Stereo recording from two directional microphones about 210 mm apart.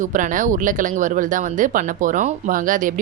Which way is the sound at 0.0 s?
40° right (ahead or behind).